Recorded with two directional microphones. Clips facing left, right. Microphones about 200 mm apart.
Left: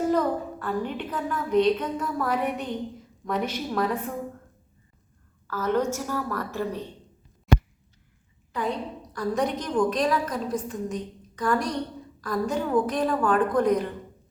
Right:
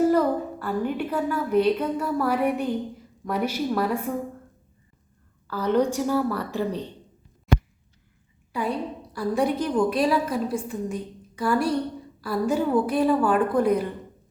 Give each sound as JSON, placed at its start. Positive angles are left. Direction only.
{"t": 0.1, "sound": "a woman's voice", "side_deg": -10}
{"t": 5.5, "sound": "a woman's voice", "side_deg": -15}
{"t": 7.5, "sound": "a sound", "side_deg": 0}
{"t": 8.5, "sound": "a woman's voice", "side_deg": -10}